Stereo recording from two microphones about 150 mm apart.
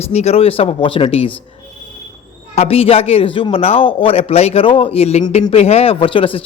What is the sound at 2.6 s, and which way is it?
A man's voice, 40° left (ahead or behind).